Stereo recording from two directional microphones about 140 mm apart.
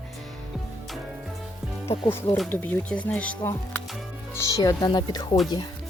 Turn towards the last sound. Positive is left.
turn(degrees=30)  # may be behind; listen again after turning